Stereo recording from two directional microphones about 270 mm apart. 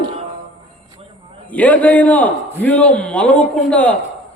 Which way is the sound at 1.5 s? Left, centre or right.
Centre.